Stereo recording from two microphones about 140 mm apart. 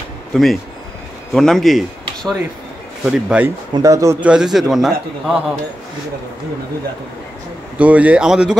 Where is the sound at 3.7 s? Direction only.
25° right (ahead or behind).